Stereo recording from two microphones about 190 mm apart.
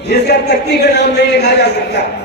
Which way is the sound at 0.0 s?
60° left (ahead or behind).